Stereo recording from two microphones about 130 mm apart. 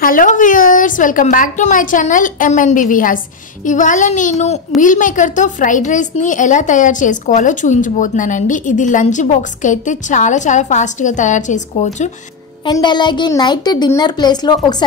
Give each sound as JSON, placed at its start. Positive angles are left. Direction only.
{"t": 0.0, "sound": "a woman's voice", "side_deg": 90}
{"t": 3.6, "sound": "a woman's voice", "side_deg": 75}
{"t": 4.8, "sound": "a woman's voice", "side_deg": 80}
{"t": 12.6, "sound": "a child's voice", "side_deg": 35}